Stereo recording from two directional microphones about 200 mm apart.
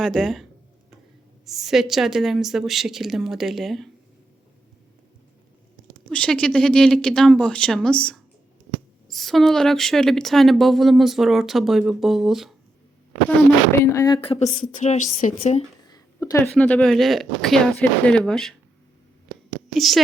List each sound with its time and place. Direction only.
0.0 s speech: centre (ahead or behind)
1.5 s speech: centre (ahead or behind)
6.1 s speech: 5° left (ahead or behind)
13.9 s speech: 15° left (ahead or behind)
14.2 s a woman's voice: 30° left (ahead or behind)
15.9 s a sound: 15° left (ahead or behind)
16.5 s speech: 5° left (ahead or behind)
19.7 s speech: centre (ahead or behind)